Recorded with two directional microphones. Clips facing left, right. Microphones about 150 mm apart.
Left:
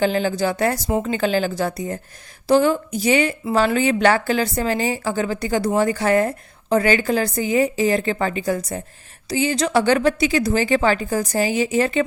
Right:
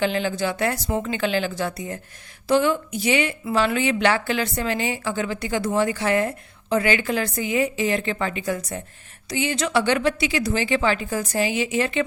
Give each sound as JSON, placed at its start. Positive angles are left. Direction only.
{"t": 0.0, "sound": "a woman's voice", "side_deg": 40}